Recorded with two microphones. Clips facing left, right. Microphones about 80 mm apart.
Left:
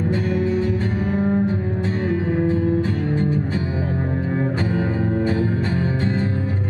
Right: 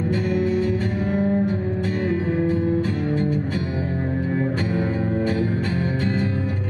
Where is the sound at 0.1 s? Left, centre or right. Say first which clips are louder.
Right 1 dB; left.